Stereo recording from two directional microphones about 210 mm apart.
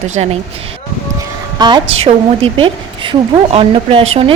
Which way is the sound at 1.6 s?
20° right (ahead or behind).